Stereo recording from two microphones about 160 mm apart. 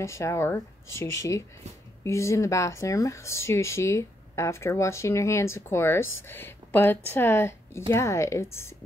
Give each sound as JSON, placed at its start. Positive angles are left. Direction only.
{"t": 0.0, "sound": "speech", "side_deg": 20}